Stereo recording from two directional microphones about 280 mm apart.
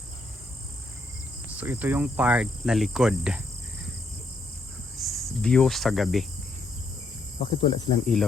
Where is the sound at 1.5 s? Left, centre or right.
Centre.